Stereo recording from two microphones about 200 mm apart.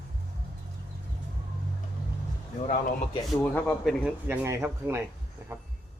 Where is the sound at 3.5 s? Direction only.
10° left (ahead or behind).